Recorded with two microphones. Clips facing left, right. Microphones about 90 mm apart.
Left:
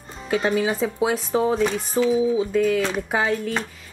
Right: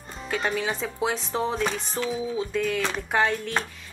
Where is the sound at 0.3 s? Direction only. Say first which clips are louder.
Left 6 dB; 5° left (ahead or behind).